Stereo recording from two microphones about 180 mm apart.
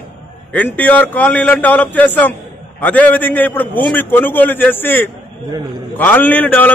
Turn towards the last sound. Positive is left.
turn(degrees=10)  # may be behind; listen again after turning